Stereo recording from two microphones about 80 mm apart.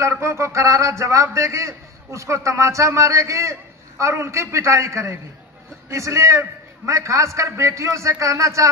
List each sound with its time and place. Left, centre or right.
0.0 s a man's voice: right